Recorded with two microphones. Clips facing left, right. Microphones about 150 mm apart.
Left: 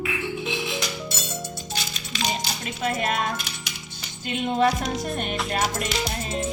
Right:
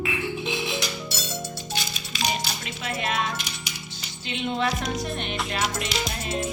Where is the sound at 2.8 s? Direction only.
50° left (ahead or behind).